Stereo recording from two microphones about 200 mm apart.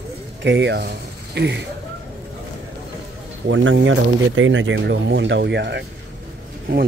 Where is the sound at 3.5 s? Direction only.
70° right (ahead or behind).